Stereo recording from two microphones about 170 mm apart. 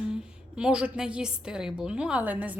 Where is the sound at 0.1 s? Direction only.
5° right (ahead or behind).